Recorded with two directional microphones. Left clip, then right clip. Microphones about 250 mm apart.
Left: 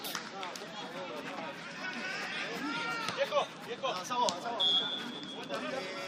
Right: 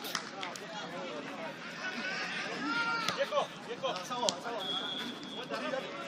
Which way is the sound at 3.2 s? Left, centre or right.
Centre.